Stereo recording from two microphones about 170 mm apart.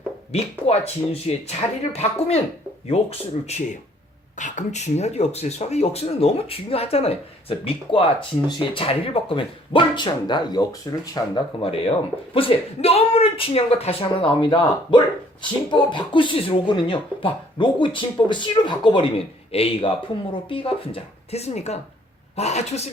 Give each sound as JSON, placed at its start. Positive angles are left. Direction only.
{"t": 0.3, "sound": "speech", "side_deg": 40}
{"t": 12.3, "sound": "speech", "side_deg": 35}